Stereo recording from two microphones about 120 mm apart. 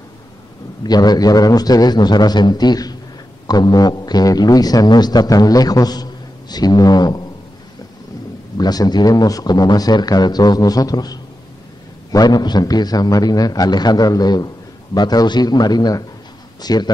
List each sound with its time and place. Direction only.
0.8 s a man's voice: 35° left (ahead or behind)
8.5 s a man's voice: 35° left (ahead or behind)